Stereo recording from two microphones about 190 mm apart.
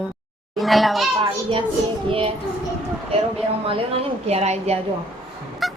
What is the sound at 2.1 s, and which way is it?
Speech, 30° right (ahead or behind).